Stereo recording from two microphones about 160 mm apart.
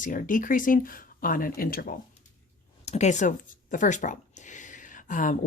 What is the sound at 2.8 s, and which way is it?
Speech, 45° left (ahead or behind).